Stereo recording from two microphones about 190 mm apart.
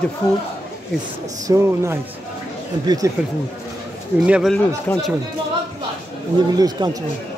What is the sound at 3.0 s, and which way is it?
Speech, 15° right (ahead or behind).